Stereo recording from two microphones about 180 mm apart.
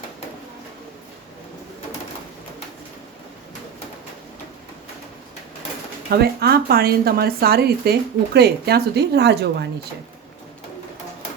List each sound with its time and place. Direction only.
6.1 s speech: 60° right (ahead or behind)